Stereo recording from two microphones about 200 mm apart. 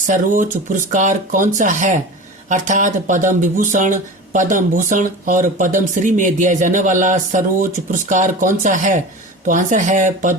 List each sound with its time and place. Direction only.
0.1 s speech: 40° right (ahead or behind)